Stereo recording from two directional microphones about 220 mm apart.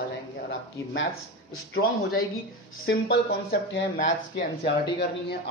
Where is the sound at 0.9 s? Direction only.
60° left (ahead or behind).